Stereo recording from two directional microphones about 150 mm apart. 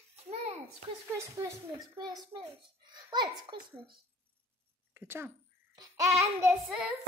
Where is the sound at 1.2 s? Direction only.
20° right (ahead or behind).